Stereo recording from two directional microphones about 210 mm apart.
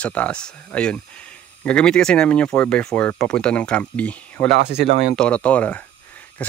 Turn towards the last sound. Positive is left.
turn(degrees=5)  # may be behind; listen again after turning